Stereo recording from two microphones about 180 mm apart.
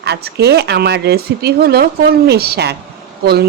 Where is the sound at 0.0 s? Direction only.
65° right (ahead or behind).